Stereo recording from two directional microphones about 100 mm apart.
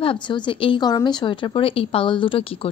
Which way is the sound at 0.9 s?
45° left (ahead or behind).